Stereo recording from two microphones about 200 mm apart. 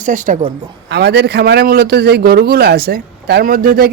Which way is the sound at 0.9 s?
55° right (ahead or behind).